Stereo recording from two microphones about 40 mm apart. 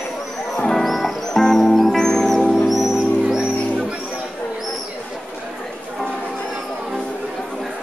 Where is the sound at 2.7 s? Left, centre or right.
Centre.